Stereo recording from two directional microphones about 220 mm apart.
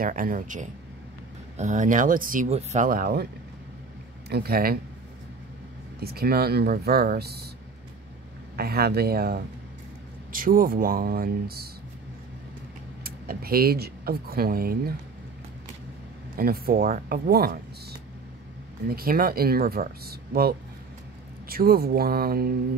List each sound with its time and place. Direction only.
0.0 s speech: 40° right (ahead or behind)
4.3 s speech: 45° right (ahead or behind)
5.9 s speech: 45° right (ahead or behind)
8.5 s speech: 45° right (ahead or behind)
13.0 s speech: 45° right (ahead or behind)
16.3 s speech: 45° right (ahead or behind)
18.9 s speech: 40° right (ahead or behind)